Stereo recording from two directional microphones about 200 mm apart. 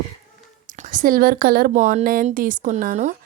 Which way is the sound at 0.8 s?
40° right (ahead or behind).